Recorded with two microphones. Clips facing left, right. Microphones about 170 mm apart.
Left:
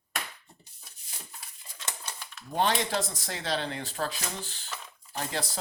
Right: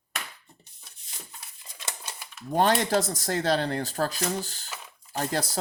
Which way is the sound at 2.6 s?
45° right (ahead or behind).